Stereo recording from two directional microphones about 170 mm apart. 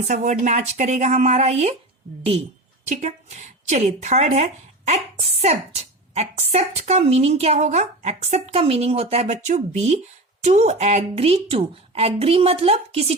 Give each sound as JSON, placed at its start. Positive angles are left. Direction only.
{"t": 0.1, "sound": "speech", "side_deg": -45}
{"t": 2.8, "sound": "a woman's voice", "side_deg": -40}